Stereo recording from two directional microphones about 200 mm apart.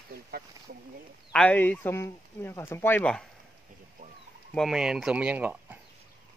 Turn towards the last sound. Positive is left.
turn(degrees=-10)  # may be behind; listen again after turning